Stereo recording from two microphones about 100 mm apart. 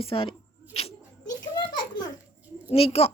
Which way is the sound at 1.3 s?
45° left (ahead or behind).